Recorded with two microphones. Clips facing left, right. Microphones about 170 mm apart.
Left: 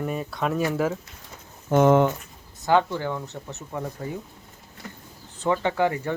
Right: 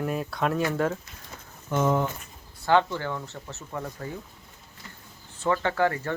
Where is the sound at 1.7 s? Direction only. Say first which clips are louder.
Left 7 dB; 65° left (ahead or behind).